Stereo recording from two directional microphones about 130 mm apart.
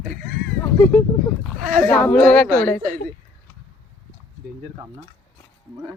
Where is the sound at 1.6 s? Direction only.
90° right.